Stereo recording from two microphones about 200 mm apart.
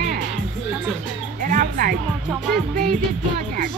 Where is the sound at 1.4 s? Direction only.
45° right (ahead or behind).